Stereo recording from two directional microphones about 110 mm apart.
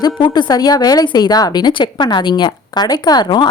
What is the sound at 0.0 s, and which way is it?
Speech, 45° left (ahead or behind).